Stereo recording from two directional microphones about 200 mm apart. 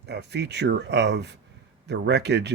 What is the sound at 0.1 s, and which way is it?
Speech, 55° right (ahead or behind).